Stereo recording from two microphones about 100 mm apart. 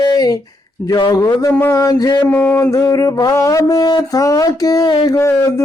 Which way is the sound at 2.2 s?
20° left (ahead or behind).